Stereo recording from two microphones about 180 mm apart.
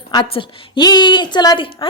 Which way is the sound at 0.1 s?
25° left (ahead or behind).